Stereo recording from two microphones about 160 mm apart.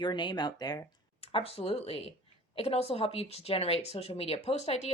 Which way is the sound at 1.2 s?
35° left (ahead or behind).